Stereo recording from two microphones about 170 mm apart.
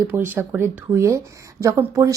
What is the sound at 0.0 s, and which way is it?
A woman's voice, 15° right (ahead or behind).